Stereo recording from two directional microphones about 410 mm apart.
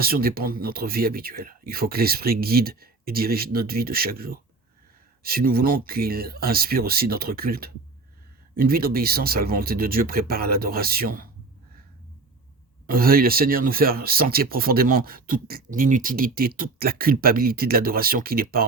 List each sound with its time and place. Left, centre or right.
0.0 s speech: right
12.9 s speech: right